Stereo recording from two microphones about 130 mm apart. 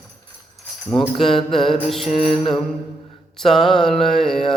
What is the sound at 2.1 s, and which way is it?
Mantra, 45° left (ahead or behind).